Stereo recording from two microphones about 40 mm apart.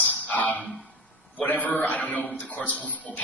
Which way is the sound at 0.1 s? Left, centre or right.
Left.